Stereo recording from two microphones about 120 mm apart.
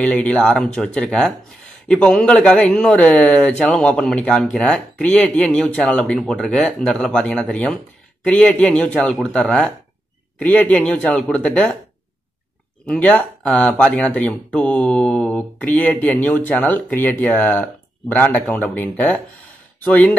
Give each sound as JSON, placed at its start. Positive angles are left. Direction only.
{"t": 0.0, "sound": "speech", "side_deg": 10}
{"t": 12.8, "sound": "speech", "side_deg": 10}
{"t": 19.8, "sound": "speech", "side_deg": 10}